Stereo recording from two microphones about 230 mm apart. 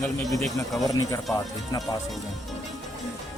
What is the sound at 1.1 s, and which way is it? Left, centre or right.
Speech, centre.